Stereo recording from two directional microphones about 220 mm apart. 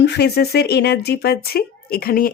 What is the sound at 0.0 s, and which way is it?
Speech, 50° left (ahead or behind).